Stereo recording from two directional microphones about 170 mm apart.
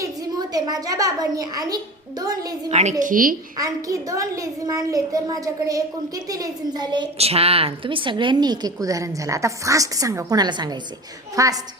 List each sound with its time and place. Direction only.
0.0 s a woman's voice: 20° right (ahead or behind)
3.0 s speech: 55° right (ahead or behind)
3.6 s a woman's voice: 20° right (ahead or behind)